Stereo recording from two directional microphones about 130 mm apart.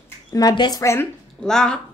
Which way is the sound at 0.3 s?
30° left (ahead or behind).